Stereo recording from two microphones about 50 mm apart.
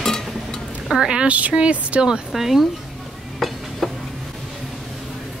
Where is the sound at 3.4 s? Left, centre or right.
Centre.